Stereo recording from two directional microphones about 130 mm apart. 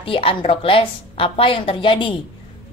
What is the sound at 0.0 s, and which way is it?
A woman's voice, 45° left (ahead or behind).